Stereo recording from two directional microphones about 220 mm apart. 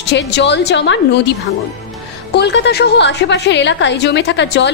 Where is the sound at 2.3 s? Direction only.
50° left (ahead or behind).